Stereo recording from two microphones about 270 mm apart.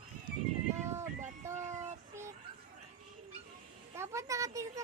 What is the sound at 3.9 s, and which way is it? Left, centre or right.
Speech, centre.